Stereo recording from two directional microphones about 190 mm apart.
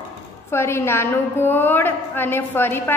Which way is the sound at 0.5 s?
15° left (ahead or behind).